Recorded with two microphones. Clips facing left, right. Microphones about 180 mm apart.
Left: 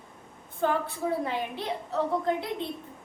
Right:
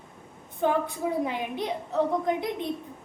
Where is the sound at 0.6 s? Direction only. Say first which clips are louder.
Right 2 dB; 15° right (ahead or behind).